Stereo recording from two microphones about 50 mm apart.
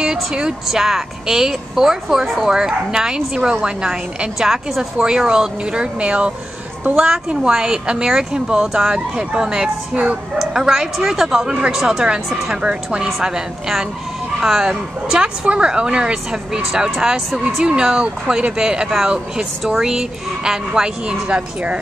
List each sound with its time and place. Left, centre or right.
0.0 s a woman's voice: centre
19.6 s a woman's voice: centre; by 21.7 s right